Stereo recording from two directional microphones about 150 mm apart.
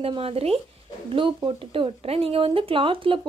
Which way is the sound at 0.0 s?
40° right (ahead or behind).